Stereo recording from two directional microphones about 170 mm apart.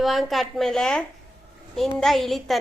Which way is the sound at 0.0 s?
Centre (ahead or behind).